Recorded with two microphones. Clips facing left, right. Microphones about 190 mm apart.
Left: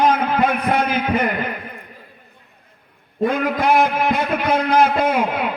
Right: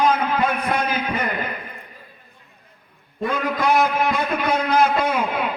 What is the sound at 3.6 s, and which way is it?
A man's voice, 55° left (ahead or behind).